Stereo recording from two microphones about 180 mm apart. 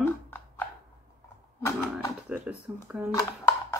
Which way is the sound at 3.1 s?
15° left (ahead or behind).